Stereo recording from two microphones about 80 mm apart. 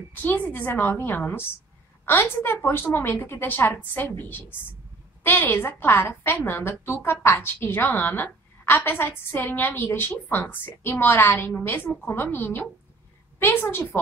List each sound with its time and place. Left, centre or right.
0.1 s a woman's voice: left
5.2 s a woman's voice: left